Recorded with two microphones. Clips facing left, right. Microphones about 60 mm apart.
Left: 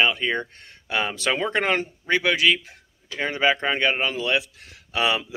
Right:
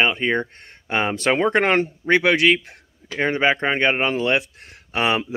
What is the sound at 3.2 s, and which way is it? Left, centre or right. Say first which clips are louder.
A man's voice: right 3 dB; right.